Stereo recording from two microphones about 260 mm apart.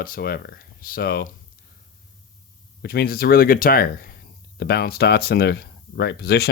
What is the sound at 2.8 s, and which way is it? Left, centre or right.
Speech, left.